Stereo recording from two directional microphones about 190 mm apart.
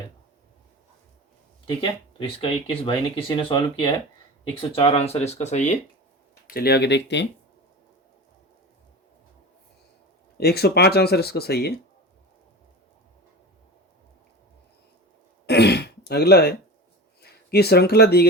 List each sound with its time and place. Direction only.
1.6 s speech: 25° left (ahead or behind)
6.5 s speech: 55° left (ahead or behind)
10.3 s speech: 55° left (ahead or behind)
15.4 s throat clearing: 60° left (ahead or behind)
17.2 s speech: 55° left (ahead or behind)